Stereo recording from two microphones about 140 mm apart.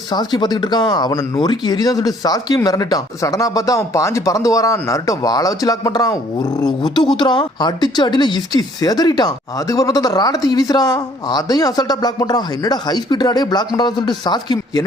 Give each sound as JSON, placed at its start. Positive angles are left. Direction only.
{"t": 0.1, "sound": "speech", "side_deg": 30}